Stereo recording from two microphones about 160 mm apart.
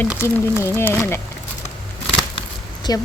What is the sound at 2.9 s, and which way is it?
Speech, 25° left (ahead or behind).